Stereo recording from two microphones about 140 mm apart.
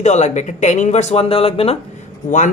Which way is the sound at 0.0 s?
55° left (ahead or behind).